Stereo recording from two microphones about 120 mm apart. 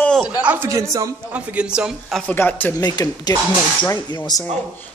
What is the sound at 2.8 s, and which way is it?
Speech, 35° left (ahead or behind).